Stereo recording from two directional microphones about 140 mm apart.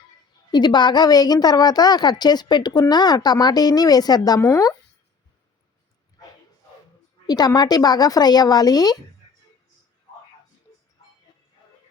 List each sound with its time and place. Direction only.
0.5 s a woman's voice: 30° left (ahead or behind)
7.3 s a woman's voice: 30° left (ahead or behind)